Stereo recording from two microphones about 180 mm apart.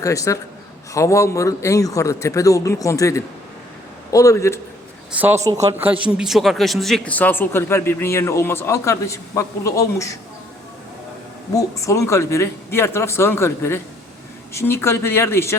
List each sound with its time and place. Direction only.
0.0 s a man's voice: 15° left (ahead or behind)
5.1 s a man's voice: 10° right (ahead or behind); by 10.2 s 15° left (ahead or behind)
11.5 s a man's voice: 15° left (ahead or behind)